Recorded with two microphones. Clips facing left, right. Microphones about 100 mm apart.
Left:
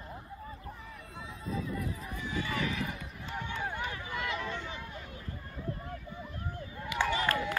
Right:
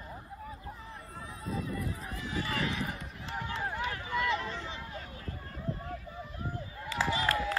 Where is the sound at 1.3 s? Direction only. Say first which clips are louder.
Even; centre (ahead or behind).